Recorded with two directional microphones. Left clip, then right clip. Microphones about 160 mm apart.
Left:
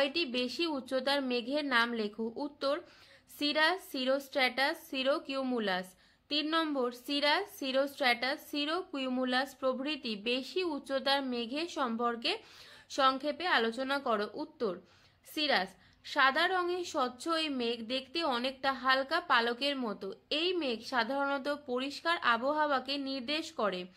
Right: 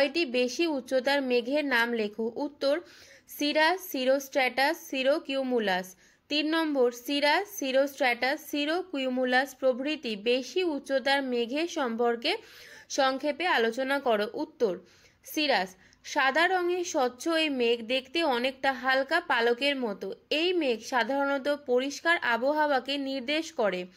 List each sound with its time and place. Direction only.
0.0 s a woman's voice: 10° right (ahead or behind)